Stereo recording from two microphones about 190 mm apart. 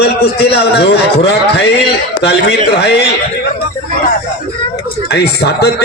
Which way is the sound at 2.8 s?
60° left (ahead or behind).